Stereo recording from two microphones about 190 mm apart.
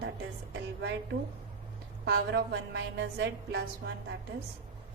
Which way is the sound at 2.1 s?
60° right (ahead or behind).